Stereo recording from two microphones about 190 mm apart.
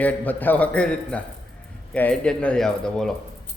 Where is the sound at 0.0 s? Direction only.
10° left (ahead or behind).